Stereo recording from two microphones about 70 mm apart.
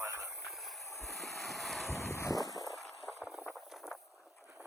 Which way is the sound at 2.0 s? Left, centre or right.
Left.